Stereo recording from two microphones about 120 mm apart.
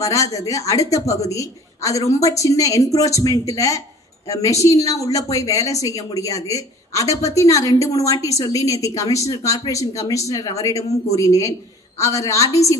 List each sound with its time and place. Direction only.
0.0 s a woman's voice: 25° left (ahead or behind)